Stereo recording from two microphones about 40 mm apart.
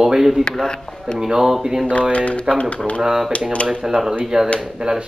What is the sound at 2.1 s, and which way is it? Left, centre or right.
Speech, left.